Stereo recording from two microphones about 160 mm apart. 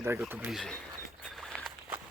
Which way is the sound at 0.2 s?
5° right (ahead or behind).